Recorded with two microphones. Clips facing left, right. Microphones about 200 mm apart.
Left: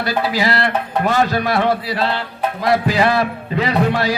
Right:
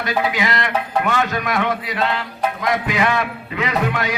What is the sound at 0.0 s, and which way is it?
A man's voice, 35° left (ahead or behind).